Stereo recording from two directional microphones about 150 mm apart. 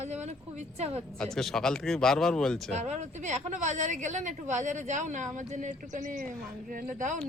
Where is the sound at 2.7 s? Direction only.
50° right (ahead or behind).